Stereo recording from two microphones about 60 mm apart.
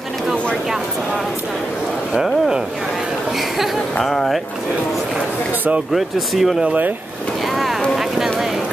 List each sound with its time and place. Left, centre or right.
4.0 s speech: centre
5.9 s speech: centre
6.6 s speech: right
7.9 s a sound: centre